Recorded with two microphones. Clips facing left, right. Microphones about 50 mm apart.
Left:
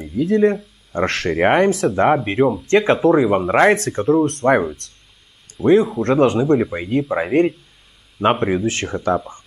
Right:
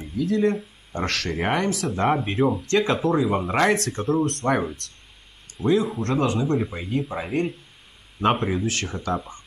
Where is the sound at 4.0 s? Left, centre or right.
Left.